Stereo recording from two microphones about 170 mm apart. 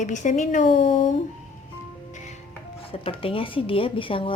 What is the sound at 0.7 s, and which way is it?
Speech, 35° left (ahead or behind).